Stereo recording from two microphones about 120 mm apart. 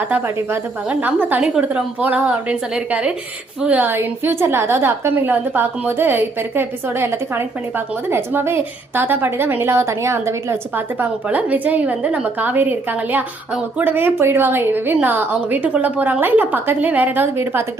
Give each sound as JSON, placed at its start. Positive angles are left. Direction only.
{"t": 0.1, "sound": "a woman's voice", "side_deg": -15}